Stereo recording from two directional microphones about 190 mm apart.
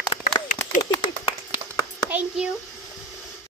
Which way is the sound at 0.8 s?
20° left (ahead or behind).